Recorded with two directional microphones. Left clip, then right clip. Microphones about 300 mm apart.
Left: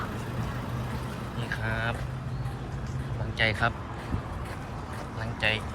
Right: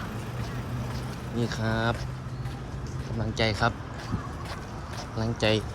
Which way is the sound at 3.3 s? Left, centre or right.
Centre.